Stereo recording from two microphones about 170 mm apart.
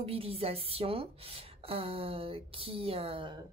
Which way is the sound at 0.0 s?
35° right (ahead or behind).